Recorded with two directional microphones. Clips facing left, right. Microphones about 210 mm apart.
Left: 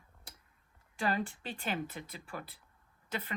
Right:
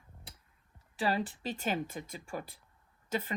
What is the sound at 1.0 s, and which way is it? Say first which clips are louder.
Speech: right 2 dB; 35° right (ahead or behind).